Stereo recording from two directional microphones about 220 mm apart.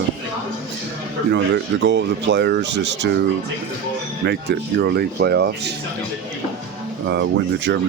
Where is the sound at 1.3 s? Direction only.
55° right (ahead or behind).